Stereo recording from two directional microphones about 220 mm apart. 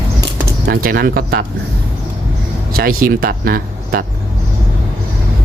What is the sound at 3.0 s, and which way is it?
Speech, 40° right (ahead or behind).